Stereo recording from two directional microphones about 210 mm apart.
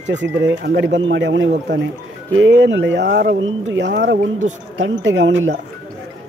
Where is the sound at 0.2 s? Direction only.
60° right (ahead or behind).